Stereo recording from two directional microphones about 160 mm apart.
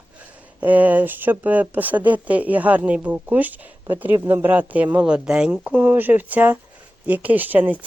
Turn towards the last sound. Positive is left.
turn(degrees=-10)  # may be behind; listen again after turning